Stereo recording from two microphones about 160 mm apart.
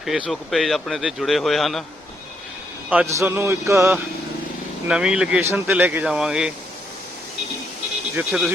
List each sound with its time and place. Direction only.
0.0 s speech: centre (ahead or behind)
3.1 s speech: 15° right (ahead or behind)
4.9 s speech: 5° right (ahead or behind)
8.1 s speech: 10° right (ahead or behind)